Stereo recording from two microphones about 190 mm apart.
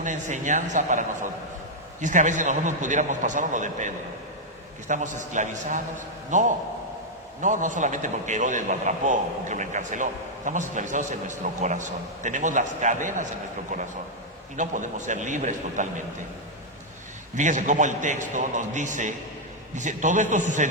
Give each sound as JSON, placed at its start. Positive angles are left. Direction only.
{"t": 0.0, "sound": "a man's voice", "side_deg": -40}
{"t": 14.5, "sound": "a man's voice", "side_deg": -40}
{"t": 17.3, "sound": "a man's voice", "side_deg": -40}